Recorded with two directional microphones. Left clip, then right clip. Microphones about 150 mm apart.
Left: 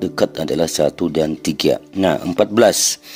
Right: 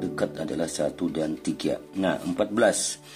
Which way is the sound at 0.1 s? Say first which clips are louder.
Left 10 dB; 55° left (ahead or behind).